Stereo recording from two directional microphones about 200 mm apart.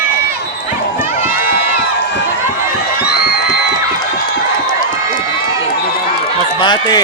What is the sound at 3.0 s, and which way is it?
Music, 55° left (ahead or behind).